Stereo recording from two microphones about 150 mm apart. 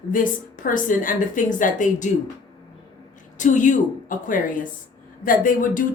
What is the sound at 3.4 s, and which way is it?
A woman's voice, 55° left (ahead or behind).